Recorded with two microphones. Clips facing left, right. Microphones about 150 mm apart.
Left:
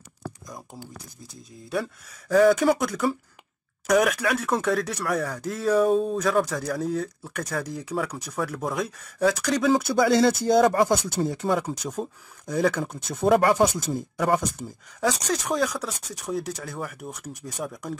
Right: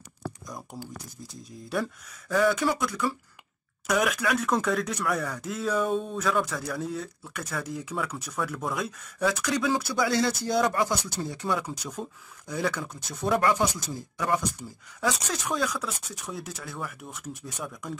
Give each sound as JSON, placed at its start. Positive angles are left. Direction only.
{"t": 2.2, "sound": "speech", "side_deg": 40}
{"t": 4.0, "sound": "speech", "side_deg": 35}